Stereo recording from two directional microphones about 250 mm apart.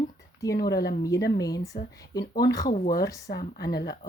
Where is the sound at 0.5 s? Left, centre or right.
Left.